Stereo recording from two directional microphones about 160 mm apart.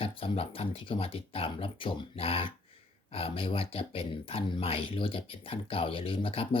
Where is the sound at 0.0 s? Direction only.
35° left (ahead or behind).